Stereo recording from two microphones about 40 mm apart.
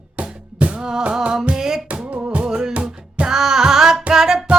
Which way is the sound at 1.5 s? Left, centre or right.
Centre.